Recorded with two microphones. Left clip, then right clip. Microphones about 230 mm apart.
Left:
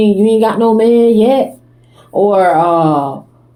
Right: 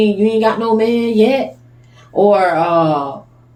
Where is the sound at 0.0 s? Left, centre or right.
Left.